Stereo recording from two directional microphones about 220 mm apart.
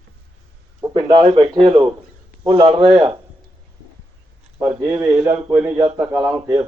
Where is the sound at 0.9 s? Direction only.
25° right (ahead or behind).